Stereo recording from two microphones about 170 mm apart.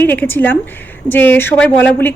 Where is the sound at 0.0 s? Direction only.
10° left (ahead or behind).